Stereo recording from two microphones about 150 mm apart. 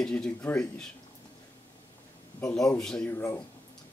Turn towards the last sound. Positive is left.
turn(degrees=15)  # may be behind; listen again after turning